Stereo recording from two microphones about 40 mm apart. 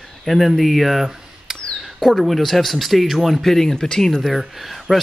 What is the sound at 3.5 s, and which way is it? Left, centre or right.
Speech, centre.